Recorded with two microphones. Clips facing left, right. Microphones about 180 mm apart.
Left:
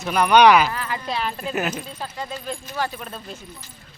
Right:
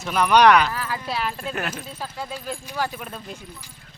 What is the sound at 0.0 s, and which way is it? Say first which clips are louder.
Speech: left 2 dB; centre (ahead or behind).